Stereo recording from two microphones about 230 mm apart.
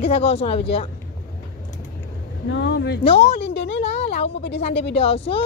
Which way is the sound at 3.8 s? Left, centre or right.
Left.